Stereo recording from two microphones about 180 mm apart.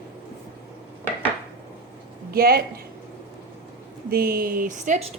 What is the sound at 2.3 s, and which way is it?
Speech, 55° right (ahead or behind).